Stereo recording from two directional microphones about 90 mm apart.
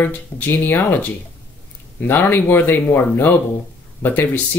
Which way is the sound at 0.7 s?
20° left (ahead or behind).